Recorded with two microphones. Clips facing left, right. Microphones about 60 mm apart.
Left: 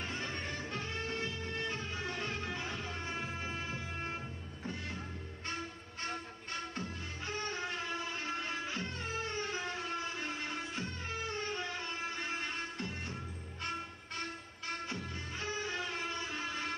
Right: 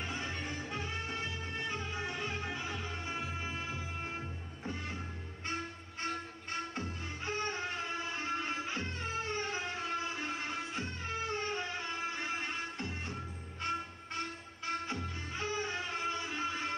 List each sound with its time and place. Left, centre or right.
0.0 s music: centre
6.0 s music: right
14.7 s music: right